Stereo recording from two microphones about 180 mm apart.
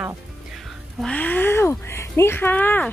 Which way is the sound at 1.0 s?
10° left (ahead or behind).